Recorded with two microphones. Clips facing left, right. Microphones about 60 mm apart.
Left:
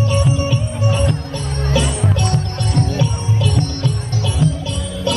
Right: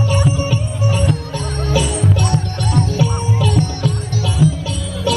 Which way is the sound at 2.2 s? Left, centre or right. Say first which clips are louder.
Right 1 dB; centre.